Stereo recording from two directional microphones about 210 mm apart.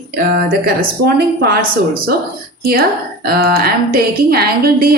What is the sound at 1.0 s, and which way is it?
Speech, 50° right (ahead or behind).